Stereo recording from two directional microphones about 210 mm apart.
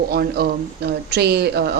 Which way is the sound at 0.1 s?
45° right (ahead or behind).